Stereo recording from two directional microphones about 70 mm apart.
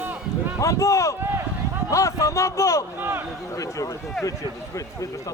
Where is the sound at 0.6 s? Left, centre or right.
Left.